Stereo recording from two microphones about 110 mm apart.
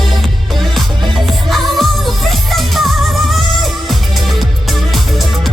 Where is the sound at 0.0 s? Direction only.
Centre (ahead or behind).